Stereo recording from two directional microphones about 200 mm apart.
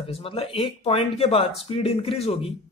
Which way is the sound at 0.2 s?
25° left (ahead or behind).